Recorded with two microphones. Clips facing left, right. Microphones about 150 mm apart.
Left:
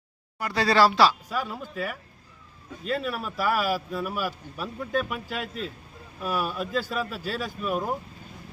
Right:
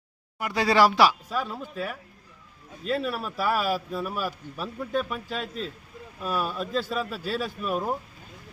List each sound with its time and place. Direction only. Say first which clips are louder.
0.3 s speech: even; 15° right (ahead or behind)
1.3 s a man's voice: even; centre (ahead or behind)